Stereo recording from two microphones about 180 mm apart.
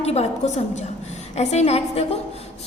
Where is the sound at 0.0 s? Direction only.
35° left (ahead or behind).